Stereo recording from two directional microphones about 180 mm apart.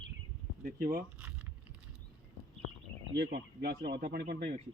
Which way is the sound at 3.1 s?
65° right (ahead or behind).